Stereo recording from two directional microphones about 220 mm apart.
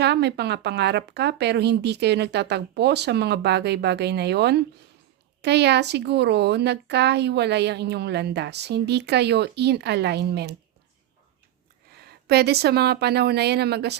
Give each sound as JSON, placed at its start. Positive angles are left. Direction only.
{"t": 0.0, "sound": "speech", "side_deg": -50}
{"t": 11.9, "sound": "speech", "side_deg": -45}